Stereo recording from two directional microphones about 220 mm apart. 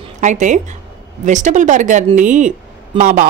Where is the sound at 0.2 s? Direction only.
35° right (ahead or behind).